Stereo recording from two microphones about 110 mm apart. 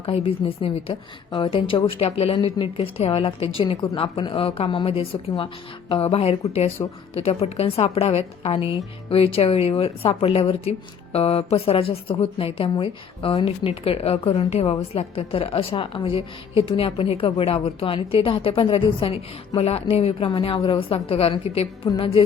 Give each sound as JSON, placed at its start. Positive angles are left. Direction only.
{"t": 0.0, "sound": "a woman's voice", "side_deg": 60}
{"t": 3.6, "sound": "a woman's voice", "side_deg": 50}
{"t": 21.8, "sound": "a woman's voice", "side_deg": 50}